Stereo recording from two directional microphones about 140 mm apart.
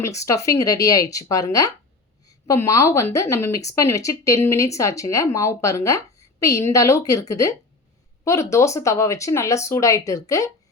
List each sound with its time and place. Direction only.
0.0 s speech: 25° left (ahead or behind)